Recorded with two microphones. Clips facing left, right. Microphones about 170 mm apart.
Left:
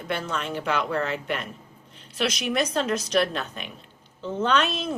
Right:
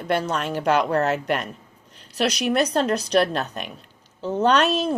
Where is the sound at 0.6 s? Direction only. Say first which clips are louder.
Right 7 dB; 40° right (ahead or behind).